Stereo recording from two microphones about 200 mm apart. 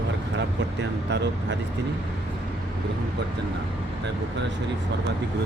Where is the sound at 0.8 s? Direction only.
60° right (ahead or behind).